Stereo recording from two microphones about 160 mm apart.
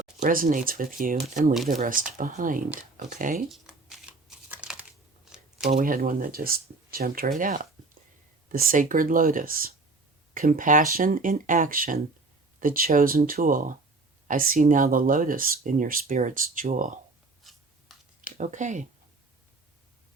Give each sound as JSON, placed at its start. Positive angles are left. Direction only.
{"t": 0.2, "sound": "speech", "side_deg": -60}
{"t": 3.5, "sound": "shuffling cards", "side_deg": 0}
{"t": 4.5, "sound": "crumpling", "side_deg": -5}
{"t": 5.6, "sound": "speech", "side_deg": -60}
{"t": 17.4, "sound": "scissors", "side_deg": 0}
{"t": 18.3, "sound": "speech", "side_deg": -50}